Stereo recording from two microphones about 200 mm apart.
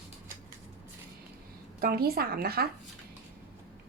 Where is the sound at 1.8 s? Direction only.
50° right (ahead or behind).